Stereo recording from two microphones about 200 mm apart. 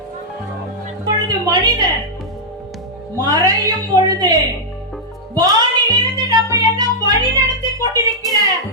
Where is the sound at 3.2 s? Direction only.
20° right (ahead or behind).